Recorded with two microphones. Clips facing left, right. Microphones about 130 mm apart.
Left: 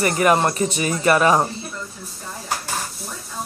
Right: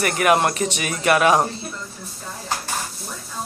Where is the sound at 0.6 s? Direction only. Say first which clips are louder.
Left 3 dB; 80° right.